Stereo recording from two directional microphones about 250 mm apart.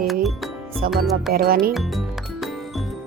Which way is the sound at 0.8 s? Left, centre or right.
Right.